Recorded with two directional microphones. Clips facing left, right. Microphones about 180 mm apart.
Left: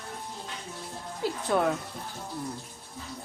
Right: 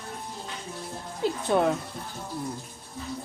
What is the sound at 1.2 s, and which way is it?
Music, 25° right (ahead or behind).